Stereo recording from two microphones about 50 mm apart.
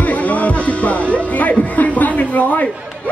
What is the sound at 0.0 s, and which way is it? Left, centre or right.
Music, left.